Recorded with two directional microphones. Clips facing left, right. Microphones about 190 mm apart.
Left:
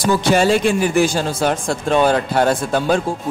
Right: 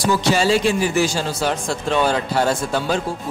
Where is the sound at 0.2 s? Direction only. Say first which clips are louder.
Left 3 dB; 55° left (ahead or behind).